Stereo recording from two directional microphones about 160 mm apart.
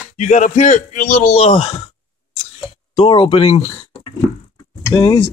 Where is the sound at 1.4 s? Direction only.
35° left (ahead or behind).